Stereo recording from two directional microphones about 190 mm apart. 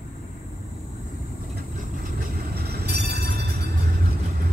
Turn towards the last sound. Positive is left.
turn(degrees=-60)  # may be behind; listen again after turning